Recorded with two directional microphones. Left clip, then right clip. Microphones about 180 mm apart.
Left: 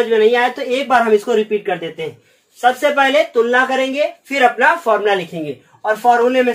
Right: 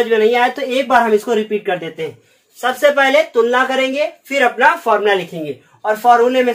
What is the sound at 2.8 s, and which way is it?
Speech, 20° right (ahead or behind).